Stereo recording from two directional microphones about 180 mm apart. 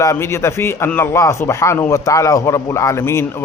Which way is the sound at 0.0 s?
15° left (ahead or behind).